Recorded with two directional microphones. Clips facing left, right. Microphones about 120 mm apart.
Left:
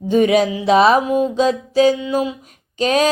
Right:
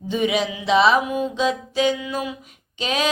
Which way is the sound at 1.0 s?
35° left (ahead or behind).